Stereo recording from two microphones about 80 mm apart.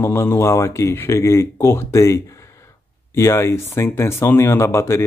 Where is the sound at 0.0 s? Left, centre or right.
Left.